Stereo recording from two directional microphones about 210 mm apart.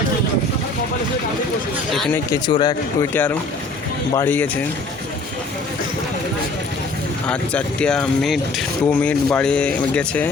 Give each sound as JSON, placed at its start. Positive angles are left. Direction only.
{"t": 1.9, "sound": "speech", "side_deg": 0}
{"t": 2.3, "sound": "speech", "side_deg": 20}
{"t": 7.3, "sound": "speech", "side_deg": 5}